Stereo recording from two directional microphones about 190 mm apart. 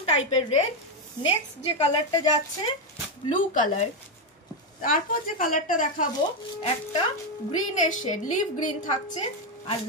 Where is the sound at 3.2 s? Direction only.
40° left (ahead or behind).